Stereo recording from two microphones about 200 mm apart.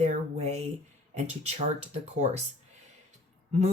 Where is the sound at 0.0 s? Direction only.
35° right (ahead or behind).